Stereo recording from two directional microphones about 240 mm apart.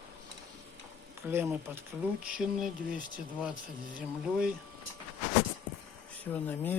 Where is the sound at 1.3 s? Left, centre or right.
Centre.